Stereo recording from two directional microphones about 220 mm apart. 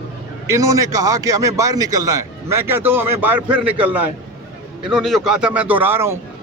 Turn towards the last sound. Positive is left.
turn(degrees=-10)  # may be behind; listen again after turning